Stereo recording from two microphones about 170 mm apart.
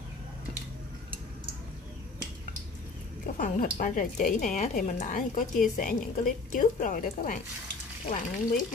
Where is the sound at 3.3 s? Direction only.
50° left (ahead or behind).